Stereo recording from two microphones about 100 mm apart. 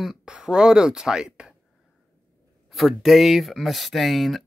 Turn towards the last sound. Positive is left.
turn(degrees=0)  # may be behind; listen again after turning